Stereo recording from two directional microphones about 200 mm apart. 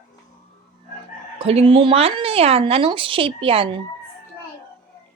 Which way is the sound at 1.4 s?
30° right (ahead or behind).